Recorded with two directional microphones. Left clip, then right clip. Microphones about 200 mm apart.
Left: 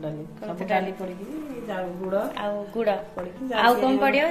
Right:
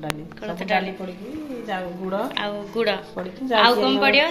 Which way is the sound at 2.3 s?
5° left (ahead or behind).